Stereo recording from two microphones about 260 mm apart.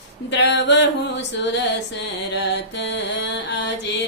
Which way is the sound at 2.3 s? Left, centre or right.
Left.